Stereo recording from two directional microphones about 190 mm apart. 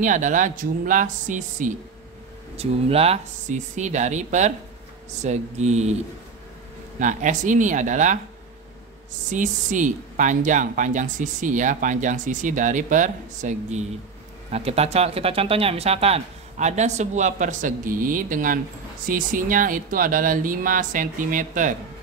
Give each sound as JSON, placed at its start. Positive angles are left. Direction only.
{"t": 0.0, "sound": "speech", "side_deg": -40}
{"t": 2.5, "sound": "a woman's voice", "side_deg": -30}
{"t": 7.0, "sound": "a woman's voice", "side_deg": -40}
{"t": 9.3, "sound": "a woman's voice", "side_deg": -40}